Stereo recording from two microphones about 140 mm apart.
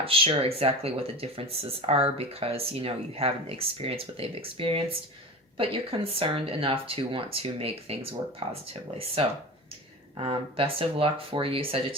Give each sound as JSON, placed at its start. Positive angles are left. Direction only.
{"t": 0.0, "sound": "speech", "side_deg": -40}